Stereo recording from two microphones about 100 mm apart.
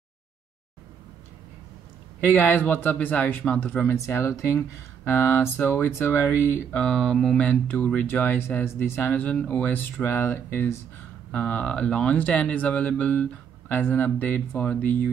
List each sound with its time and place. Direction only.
2.1 s speech: 15° left (ahead or behind)
6.8 s speech: 5° left (ahead or behind); by 10.8 s 25° left (ahead or behind)
11.3 s speech: 15° left (ahead or behind)